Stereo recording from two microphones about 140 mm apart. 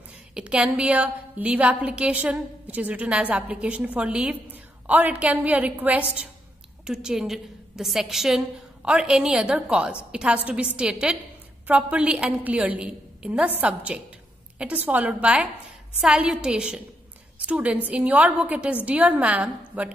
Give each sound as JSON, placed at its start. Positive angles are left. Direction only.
{"t": 0.3, "sound": "a woman's voice", "side_deg": -10}